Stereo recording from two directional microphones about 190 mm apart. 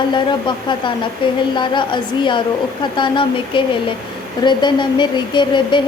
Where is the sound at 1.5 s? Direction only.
25° left (ahead or behind).